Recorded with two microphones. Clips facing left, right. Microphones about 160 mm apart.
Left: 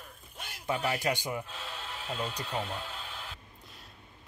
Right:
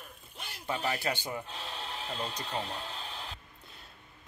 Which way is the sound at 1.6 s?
30° right (ahead or behind).